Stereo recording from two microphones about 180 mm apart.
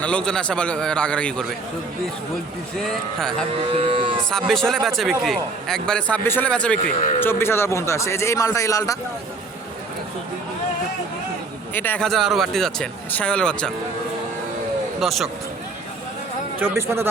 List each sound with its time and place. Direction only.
0.0 s a man's voice: 5° left (ahead or behind)
2.7 s a man's voice: 5° left (ahead or behind)
3.7 s speech: 30° right (ahead or behind)
4.3 s a man's voice: 5° left (ahead or behind)
11.7 s a man's voice: 10° left (ahead or behind)
15.0 s a man's voice: centre (ahead or behind)
16.6 s a man's voice: 10° right (ahead or behind)